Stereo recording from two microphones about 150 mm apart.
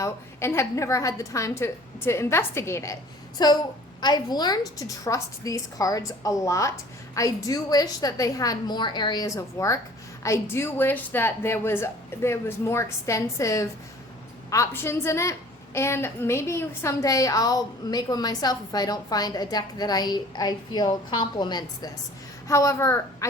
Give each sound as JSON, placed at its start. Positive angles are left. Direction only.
{"t": 0.0, "sound": "a woman's voice", "side_deg": 20}